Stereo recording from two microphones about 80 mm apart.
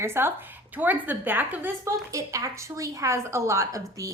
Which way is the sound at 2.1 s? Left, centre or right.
Right.